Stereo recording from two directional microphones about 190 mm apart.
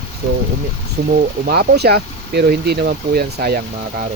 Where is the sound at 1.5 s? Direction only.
60° right (ahead or behind).